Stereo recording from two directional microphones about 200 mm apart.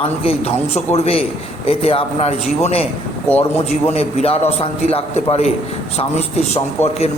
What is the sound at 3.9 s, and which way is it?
A man's voice, 30° left (ahead or behind).